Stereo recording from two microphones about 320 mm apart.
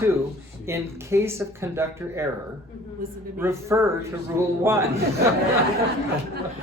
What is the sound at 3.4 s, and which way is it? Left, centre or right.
Speech, centre.